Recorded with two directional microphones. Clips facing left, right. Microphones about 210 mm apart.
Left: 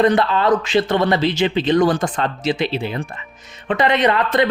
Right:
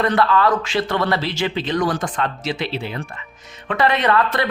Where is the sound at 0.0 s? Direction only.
20° left (ahead or behind).